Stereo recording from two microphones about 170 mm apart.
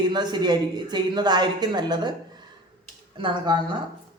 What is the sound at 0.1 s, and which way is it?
Speech, 25° right (ahead or behind).